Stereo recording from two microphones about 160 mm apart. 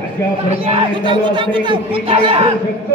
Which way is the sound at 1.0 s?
30° right (ahead or behind).